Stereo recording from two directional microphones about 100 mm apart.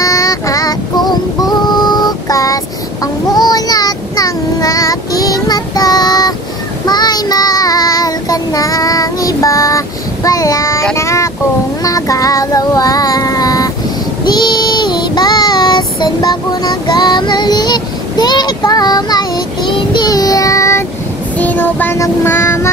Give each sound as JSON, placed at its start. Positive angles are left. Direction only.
{"t": 0.0, "sound": "female singing", "side_deg": 35}
{"t": 3.3, "sound": "child singing", "side_deg": 40}
{"t": 11.0, "sound": "a sound", "side_deg": 30}
{"t": 11.8, "sound": "child singing", "side_deg": 35}
{"t": 21.4, "sound": "child singing", "side_deg": 15}